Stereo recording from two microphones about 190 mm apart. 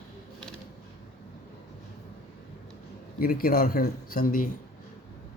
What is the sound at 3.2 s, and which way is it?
A man's voice, 50° left (ahead or behind).